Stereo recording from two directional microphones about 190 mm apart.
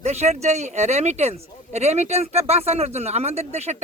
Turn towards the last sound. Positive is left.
turn(degrees=-35)  # may be behind; listen again after turning